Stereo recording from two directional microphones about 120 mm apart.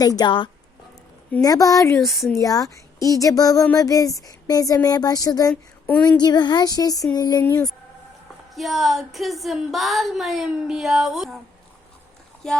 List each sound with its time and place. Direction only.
0.0 s speech: 30° left (ahead or behind)
1.4 s speech: 30° left (ahead or behind)
2.0 s speech: centre (ahead or behind)
2.3 s speech: 30° left (ahead or behind)
5.8 s a sound: 10° left (ahead or behind)
6.1 s speech: 35° left (ahead or behind)
8.5 s speech: centre (ahead or behind)